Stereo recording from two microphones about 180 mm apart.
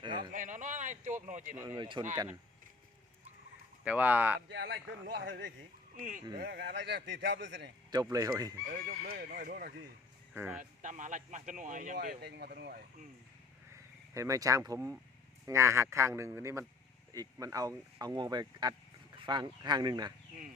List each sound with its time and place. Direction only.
0.0 s a sound: 25° right (ahead or behind)
0.3 s speech: 45° right (ahead or behind)
1.5 s a man's voice: 20° right (ahead or behind)
3.8 s a man's voice: 10° right (ahead or behind)
4.4 s a man's voice: 65° right (ahead or behind); by 5.5 s 85° right
6.0 s speech: 50° right (ahead or behind)
6.3 s a man's voice: 60° right (ahead or behind); by 7.7 s 80° right
8.1 s speech: 20° right (ahead or behind)
8.7 s speech: 55° right (ahead or behind)
10.3 s a man's voice: 10° right (ahead or behind)
10.6 s speech: 45° right (ahead or behind)
11.9 s speech: 65° right (ahead or behind)
13.7 s a man's voice: 15° right (ahead or behind)